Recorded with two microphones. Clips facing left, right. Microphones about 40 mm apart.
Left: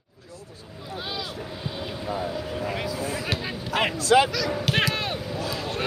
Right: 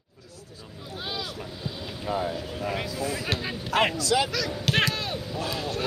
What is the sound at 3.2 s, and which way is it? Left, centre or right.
Speech, centre.